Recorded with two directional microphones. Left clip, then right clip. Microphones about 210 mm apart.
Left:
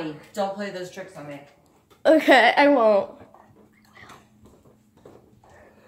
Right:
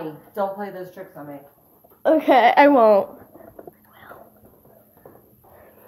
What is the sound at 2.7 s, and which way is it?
Speech, 25° right (ahead or behind).